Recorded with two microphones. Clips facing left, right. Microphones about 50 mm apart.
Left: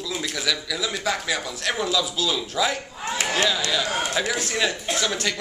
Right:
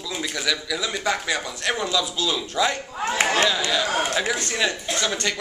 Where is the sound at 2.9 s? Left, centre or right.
Right.